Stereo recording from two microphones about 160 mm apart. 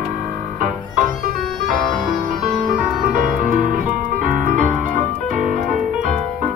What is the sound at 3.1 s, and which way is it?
Music, 55° right (ahead or behind).